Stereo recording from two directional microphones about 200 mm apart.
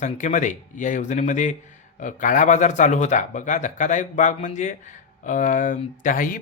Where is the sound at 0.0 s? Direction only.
40° left (ahead or behind).